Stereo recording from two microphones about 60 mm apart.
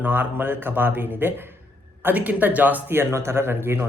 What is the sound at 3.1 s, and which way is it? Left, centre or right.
Speech, right.